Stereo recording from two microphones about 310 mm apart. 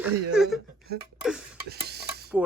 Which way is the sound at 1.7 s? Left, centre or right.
Right.